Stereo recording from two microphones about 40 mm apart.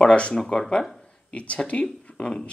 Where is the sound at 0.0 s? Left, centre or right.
Left.